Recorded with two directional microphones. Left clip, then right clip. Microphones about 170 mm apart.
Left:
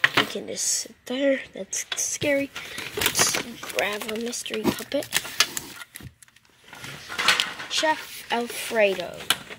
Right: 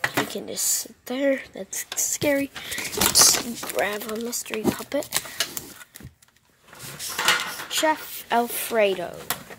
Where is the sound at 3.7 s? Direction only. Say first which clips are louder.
Even; centre (ahead or behind).